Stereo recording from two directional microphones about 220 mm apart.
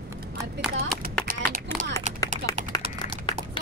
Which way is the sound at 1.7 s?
Centre (ahead or behind).